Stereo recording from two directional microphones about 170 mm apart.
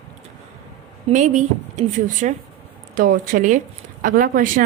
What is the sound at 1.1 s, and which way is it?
Speech, 45° right (ahead or behind).